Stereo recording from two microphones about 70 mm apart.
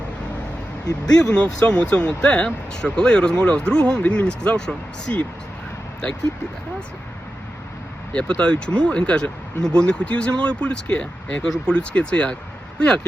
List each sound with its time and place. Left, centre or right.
1.1 s speech: centre
8.1 s speech: centre